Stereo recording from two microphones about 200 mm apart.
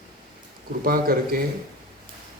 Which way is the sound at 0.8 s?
45° right (ahead or behind).